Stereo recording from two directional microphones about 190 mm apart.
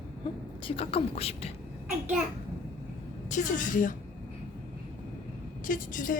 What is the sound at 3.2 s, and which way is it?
Speech, 40° left (ahead or behind).